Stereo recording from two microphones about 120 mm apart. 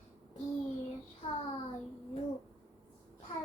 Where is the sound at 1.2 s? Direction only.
50° left (ahead or behind).